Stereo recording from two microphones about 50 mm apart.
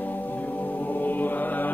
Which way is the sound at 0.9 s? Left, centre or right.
Left.